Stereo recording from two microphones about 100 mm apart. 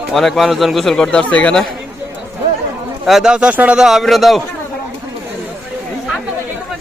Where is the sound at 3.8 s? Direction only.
Centre (ahead or behind).